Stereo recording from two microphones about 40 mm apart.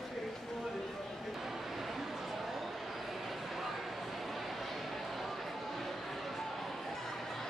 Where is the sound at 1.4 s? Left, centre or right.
Centre.